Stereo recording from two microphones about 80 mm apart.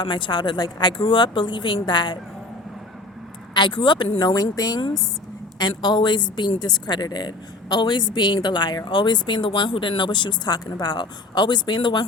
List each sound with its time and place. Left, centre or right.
0.0 s speech: left
3.5 s a woman's voice: left
5.5 s a woman's voice: left